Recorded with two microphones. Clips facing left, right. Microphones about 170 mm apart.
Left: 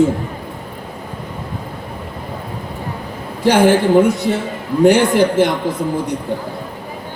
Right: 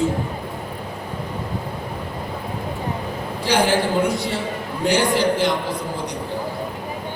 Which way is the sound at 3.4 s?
50° left (ahead or behind).